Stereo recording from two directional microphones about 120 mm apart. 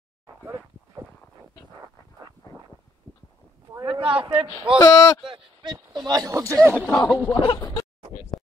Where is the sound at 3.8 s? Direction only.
45° right (ahead or behind).